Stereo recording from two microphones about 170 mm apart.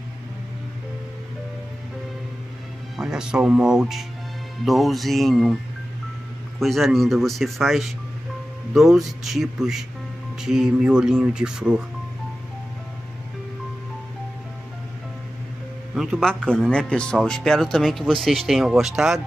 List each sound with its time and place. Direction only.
3.0 s speech: 5° right (ahead or behind)
6.6 s speech: centre (ahead or behind)
15.9 s speech: centre (ahead or behind)